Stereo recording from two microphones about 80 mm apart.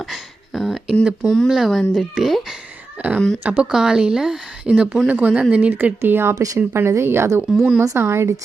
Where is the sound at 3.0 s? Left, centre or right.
Centre.